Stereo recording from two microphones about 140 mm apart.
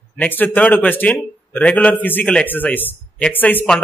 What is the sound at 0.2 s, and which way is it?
A man's voice, 15° left (ahead or behind).